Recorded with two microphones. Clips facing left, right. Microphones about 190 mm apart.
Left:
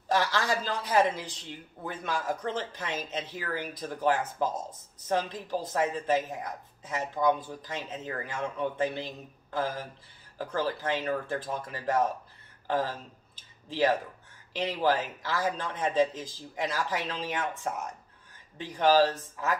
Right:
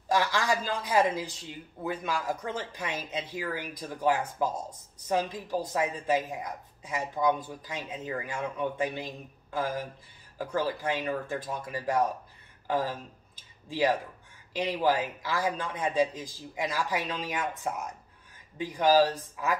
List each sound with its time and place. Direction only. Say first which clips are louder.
0.1 s a woman's voice: right 1 dB; 15° right (ahead or behind)